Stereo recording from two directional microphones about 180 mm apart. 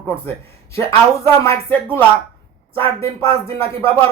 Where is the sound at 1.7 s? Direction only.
10° left (ahead or behind).